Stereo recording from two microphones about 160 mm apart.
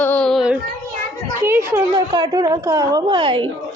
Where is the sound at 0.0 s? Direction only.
10° left (ahead or behind).